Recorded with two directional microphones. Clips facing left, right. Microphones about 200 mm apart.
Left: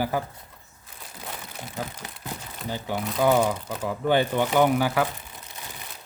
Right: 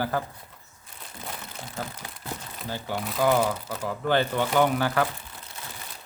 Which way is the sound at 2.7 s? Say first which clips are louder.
Left 2 dB; 15° left (ahead or behind).